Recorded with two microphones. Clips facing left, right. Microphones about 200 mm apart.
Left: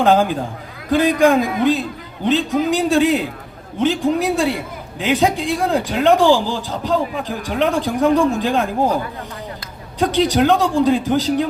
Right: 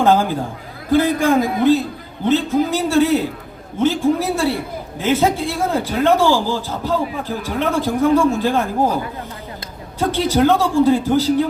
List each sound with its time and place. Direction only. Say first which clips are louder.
0.0 s a man's voice: even; 15° left (ahead or behind)
10.0 s a man's voice: even; 15° left (ahead or behind)